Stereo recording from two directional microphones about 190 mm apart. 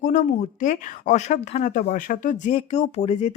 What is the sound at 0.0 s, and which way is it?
Speech, 40° left (ahead or behind).